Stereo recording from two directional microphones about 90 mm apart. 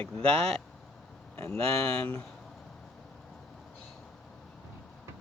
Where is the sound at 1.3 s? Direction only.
25° left (ahead or behind).